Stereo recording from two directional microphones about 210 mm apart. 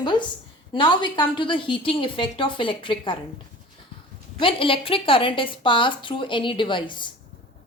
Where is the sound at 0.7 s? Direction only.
25° left (ahead or behind).